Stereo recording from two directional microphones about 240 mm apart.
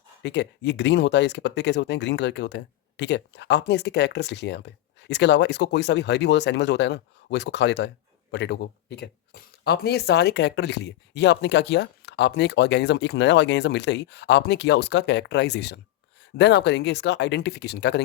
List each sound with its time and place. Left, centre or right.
0.2 s speech: left